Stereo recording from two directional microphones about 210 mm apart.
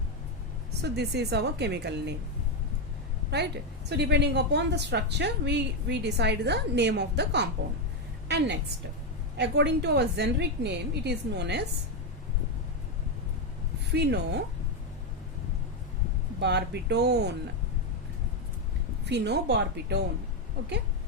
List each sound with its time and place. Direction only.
0.8 s a woman's voice: 50° right (ahead or behind)
3.2 s a woman's voice: 50° right (ahead or behind)
9.4 s a woman's voice: 55° right (ahead or behind)
13.9 s a woman's voice: 55° right (ahead or behind)
16.4 s a woman's voice: 55° right (ahead or behind)
19.0 s a woman's voice: 55° right (ahead or behind)